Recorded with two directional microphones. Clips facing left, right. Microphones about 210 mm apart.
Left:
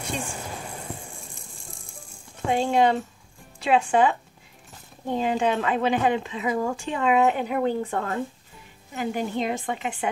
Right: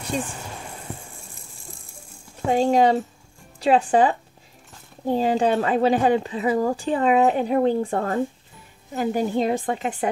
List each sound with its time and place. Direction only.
2.4 s speech: 35° right (ahead or behind)